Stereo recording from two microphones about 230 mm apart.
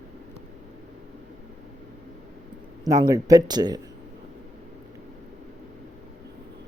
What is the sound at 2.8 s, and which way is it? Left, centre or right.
Speech, centre.